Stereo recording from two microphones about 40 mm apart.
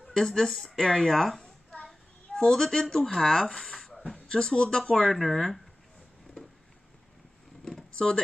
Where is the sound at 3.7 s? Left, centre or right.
Centre.